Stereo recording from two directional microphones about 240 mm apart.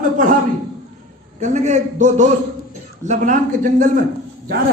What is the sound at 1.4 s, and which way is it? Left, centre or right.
A man's voice, right.